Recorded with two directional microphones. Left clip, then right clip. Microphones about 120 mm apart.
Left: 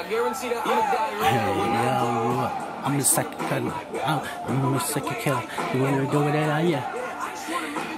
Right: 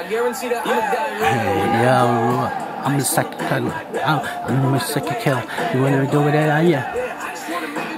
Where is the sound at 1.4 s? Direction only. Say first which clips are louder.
Right 6 dB; 15° right (ahead or behind).